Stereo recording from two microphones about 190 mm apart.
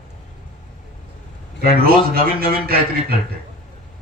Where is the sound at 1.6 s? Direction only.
50° right (ahead or behind).